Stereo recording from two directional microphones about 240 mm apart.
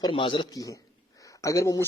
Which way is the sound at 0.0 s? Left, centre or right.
Left.